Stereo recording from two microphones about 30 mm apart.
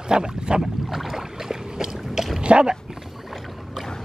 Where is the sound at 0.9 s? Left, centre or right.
Centre.